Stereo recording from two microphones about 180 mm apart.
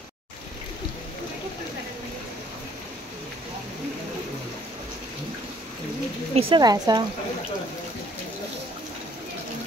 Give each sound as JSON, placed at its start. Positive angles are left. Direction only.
{"t": 6.3, "sound": "speech", "side_deg": -25}